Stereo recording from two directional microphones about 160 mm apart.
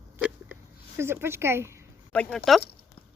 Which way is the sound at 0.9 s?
15° right (ahead or behind).